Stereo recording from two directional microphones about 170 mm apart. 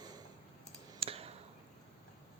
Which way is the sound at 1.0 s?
35° right (ahead or behind).